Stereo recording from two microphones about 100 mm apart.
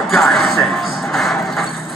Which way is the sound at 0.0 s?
Centre (ahead or behind).